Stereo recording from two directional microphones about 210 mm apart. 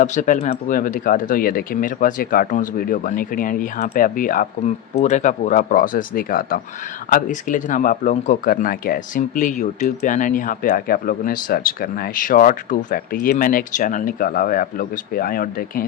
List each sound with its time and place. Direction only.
0.0 s speech: 35° left (ahead or behind)